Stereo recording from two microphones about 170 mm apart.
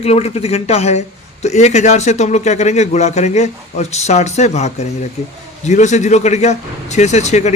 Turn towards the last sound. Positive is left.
turn(degrees=40)  # may be behind; listen again after turning